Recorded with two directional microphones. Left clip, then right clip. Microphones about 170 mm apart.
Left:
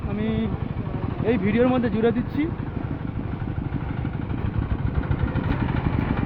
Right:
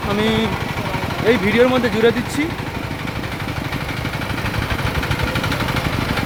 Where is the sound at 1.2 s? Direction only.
30° right (ahead or behind).